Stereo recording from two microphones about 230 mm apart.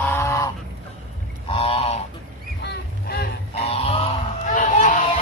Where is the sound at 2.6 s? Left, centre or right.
Left.